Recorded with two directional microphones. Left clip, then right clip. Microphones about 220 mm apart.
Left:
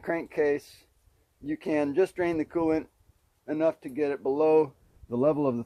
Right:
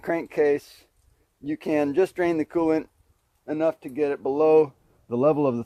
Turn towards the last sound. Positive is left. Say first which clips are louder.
# right 4 dB
turn(degrees=-40)  # may be behind; listen again after turning